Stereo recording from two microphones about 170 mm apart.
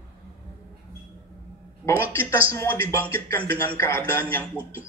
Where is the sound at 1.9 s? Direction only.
15° left (ahead or behind).